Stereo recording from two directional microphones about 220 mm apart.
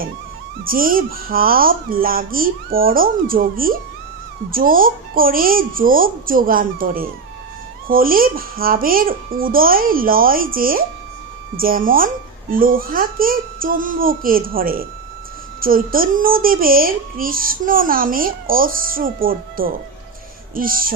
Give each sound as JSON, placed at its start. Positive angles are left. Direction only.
{"t": 0.6, "sound": "a child's voice", "side_deg": -40}